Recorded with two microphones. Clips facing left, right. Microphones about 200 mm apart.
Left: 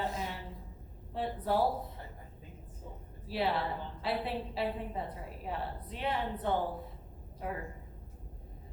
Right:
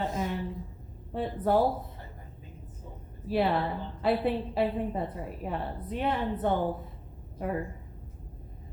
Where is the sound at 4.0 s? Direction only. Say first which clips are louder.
Right 9 dB; 50° right (ahead or behind).